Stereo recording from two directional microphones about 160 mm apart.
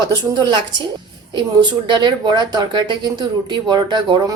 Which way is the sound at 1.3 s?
30° right (ahead or behind).